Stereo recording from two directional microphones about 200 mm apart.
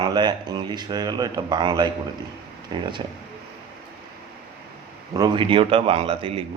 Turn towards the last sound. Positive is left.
turn(degrees=-30)  # may be behind; listen again after turning